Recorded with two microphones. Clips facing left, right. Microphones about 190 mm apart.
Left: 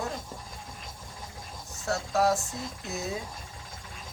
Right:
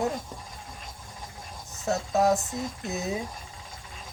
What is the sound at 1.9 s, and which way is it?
Speech, 20° right (ahead or behind).